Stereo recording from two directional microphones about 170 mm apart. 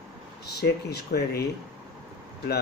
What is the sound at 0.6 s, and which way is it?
Speech, 70° left (ahead or behind).